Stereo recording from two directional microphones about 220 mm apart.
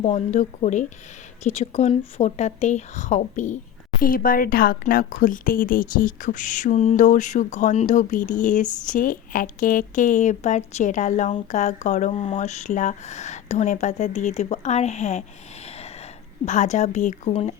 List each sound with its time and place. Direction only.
0.0 s speech: 30° left (ahead or behind)
16.5 s speech: 35° left (ahead or behind)